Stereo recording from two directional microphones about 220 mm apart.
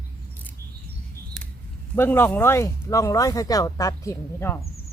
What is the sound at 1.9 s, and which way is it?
Speech, 10° left (ahead or behind).